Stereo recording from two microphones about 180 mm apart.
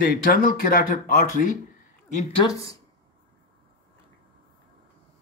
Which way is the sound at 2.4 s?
20° left (ahead or behind).